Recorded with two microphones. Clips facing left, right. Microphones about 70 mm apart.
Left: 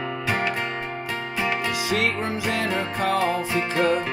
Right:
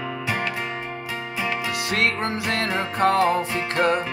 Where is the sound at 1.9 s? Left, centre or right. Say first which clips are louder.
Right 2 dB; right.